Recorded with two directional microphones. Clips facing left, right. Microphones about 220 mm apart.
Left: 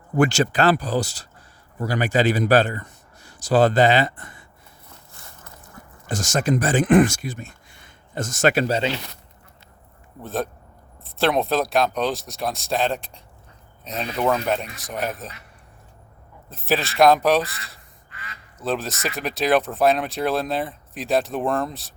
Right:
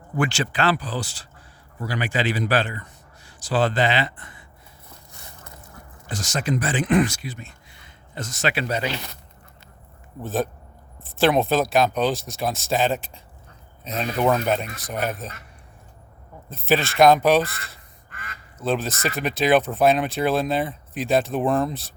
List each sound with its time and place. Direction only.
0.2 s a man's voice: 40° left (ahead or behind)
6.1 s speech: 45° left (ahead or behind)
8.6 s speech: 30° left (ahead or behind)
10.2 s speech: centre (ahead or behind)
16.5 s speech: centre (ahead or behind)
18.1 s quack: 50° right (ahead or behind)
18.6 s speech: centre (ahead or behind)